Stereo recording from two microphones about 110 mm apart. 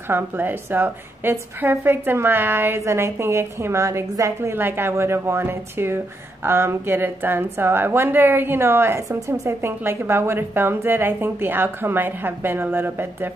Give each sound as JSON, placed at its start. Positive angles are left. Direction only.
{"t": 0.1, "sound": "a woman's voice", "side_deg": -20}